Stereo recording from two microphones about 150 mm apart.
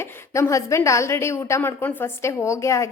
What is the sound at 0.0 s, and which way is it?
A woman's voice, 20° left (ahead or behind).